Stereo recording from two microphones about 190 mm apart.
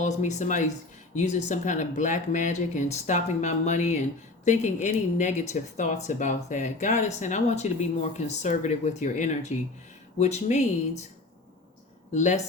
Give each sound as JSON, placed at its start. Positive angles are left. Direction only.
{"t": 0.0, "sound": "speech", "side_deg": 40}
{"t": 12.1, "sound": "speech", "side_deg": 40}